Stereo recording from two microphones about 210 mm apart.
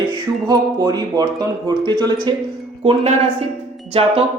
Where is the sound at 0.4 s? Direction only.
15° right (ahead or behind).